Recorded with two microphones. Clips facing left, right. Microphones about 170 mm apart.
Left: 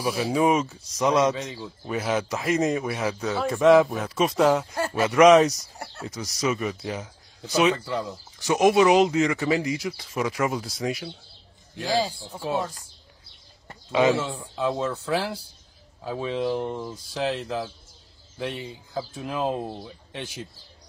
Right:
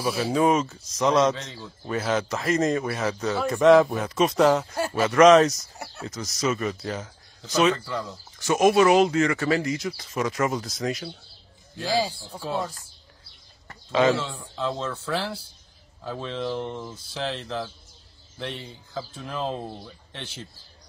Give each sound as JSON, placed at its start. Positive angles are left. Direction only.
{"t": 0.0, "sound": "speech", "side_deg": 15}
{"t": 13.7, "sound": "a sound", "side_deg": 10}
{"t": 14.5, "sound": "speech", "side_deg": 15}